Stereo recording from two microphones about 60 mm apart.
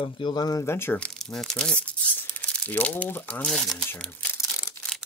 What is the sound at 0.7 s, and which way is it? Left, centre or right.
Speech, left.